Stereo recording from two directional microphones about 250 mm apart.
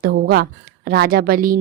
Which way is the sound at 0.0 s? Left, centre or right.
Right.